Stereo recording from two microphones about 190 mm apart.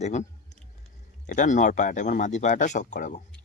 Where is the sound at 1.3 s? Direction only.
40° left (ahead or behind).